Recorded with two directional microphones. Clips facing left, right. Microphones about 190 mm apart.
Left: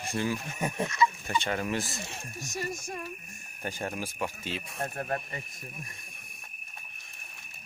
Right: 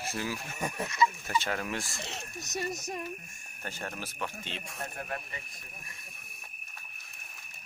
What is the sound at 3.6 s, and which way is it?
Speech, 15° left (ahead or behind).